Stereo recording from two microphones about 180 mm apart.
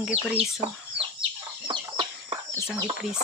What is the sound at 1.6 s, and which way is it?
Chicken, 25° right (ahead or behind).